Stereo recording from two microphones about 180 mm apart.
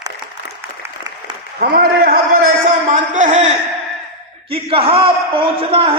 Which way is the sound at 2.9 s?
45° right (ahead or behind).